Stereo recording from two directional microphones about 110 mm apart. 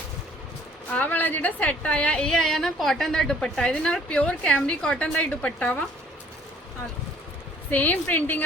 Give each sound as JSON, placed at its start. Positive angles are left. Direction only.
{"t": 0.9, "sound": "a woman's voice", "side_deg": 15}
{"t": 7.7, "sound": "a woman's voice", "side_deg": 15}